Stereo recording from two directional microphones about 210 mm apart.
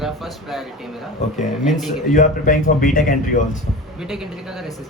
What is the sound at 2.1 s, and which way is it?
Speech, 40° left (ahead or behind).